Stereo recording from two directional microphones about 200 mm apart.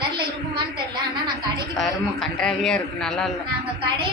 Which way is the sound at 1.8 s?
Centre (ahead or behind).